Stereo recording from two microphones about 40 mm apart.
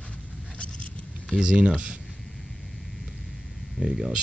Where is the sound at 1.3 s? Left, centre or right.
Right.